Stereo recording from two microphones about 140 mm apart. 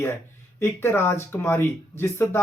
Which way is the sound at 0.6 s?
15° left (ahead or behind).